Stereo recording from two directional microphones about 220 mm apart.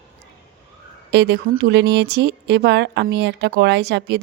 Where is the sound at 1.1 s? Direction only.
50° right (ahead or behind).